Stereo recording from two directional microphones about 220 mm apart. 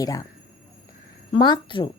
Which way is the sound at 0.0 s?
15° left (ahead or behind).